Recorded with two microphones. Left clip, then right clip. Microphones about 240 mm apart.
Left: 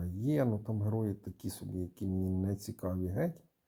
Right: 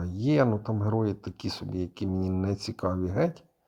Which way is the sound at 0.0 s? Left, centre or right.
Centre.